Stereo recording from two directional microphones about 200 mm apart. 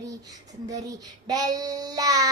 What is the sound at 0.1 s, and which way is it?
A child's voice, 15° right (ahead or behind).